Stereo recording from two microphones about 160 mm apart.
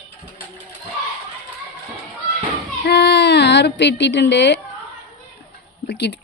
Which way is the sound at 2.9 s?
90° left.